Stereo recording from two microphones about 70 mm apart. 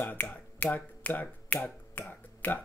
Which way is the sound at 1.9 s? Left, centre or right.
Left.